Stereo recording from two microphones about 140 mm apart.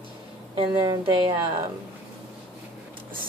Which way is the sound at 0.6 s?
30° right (ahead or behind).